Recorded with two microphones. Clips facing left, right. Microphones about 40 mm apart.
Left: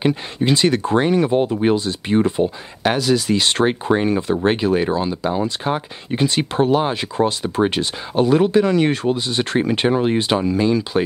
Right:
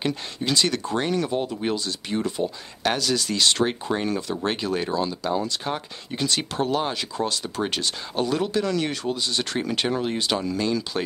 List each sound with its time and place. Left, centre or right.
0.0 s speech: left
2.8 s speech: centre